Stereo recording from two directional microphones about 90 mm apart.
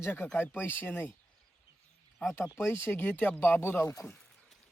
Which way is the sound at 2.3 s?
30° left (ahead or behind).